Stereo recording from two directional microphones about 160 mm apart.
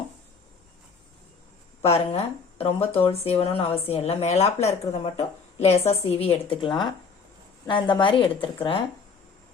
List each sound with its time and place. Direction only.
1.8 s speech: 40° left (ahead or behind)